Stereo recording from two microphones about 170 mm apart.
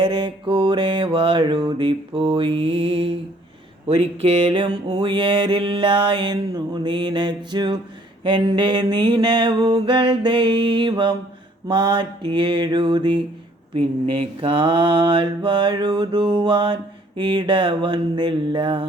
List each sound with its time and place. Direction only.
0.0 s mantra: 25° right (ahead or behind)